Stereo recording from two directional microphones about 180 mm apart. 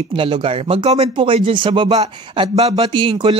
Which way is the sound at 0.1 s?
30° right (ahead or behind).